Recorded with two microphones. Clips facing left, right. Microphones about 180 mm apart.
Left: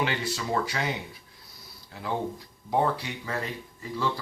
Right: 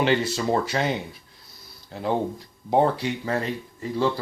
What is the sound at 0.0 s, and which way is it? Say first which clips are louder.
Speech: right 7 dB; 25° right (ahead or behind).